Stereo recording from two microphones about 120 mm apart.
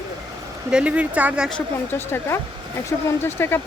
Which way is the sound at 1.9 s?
20° left (ahead or behind).